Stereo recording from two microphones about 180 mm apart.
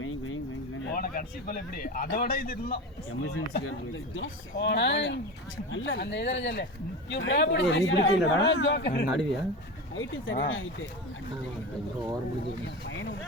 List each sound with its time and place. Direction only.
0.9 s a man's voice: 55° left (ahead or behind)
4.1 s speech: 80° left
7.1 s speech: 80° left
9.9 s speech: 90° left
12.9 s speech: 90° left